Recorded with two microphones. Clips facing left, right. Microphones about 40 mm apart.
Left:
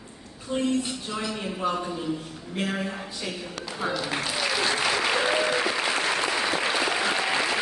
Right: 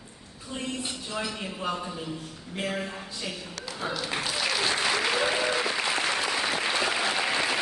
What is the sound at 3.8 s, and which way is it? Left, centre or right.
Speech, centre.